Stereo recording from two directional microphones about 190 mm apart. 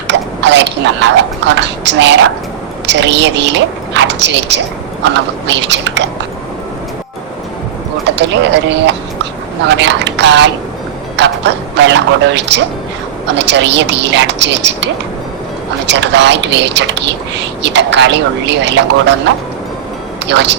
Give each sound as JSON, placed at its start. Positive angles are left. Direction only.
{"t": 0.1, "sound": "speech", "side_deg": -65}
{"t": 8.1, "sound": "speech", "side_deg": -65}
{"t": 15.9, "sound": "speech", "side_deg": -65}
{"t": 20.3, "sound": "speech", "side_deg": -65}